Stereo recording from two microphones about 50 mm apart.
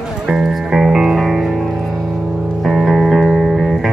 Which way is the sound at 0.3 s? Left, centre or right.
Centre.